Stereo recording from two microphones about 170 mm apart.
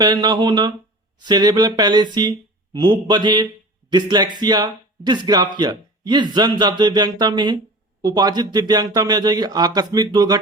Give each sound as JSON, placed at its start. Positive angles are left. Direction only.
{"t": 0.0, "sound": "a man's voice", "side_deg": -25}